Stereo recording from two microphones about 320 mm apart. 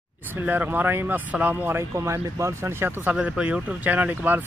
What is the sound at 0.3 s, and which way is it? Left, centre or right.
Speech, centre.